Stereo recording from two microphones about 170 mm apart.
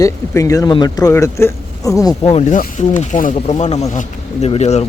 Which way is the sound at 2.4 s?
45° left (ahead or behind).